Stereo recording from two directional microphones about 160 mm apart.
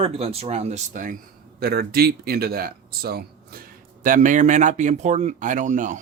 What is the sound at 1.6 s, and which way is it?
Speech, 75° right (ahead or behind).